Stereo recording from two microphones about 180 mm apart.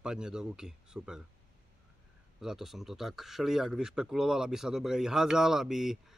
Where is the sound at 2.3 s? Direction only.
Centre (ahead or behind).